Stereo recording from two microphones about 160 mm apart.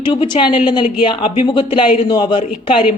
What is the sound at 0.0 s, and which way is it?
Speech, 30° left (ahead or behind).